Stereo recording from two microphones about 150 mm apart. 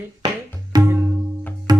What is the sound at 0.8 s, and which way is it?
Music, 15° right (ahead or behind).